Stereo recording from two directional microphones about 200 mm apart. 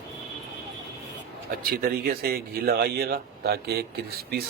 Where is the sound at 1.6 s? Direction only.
50° right (ahead or behind).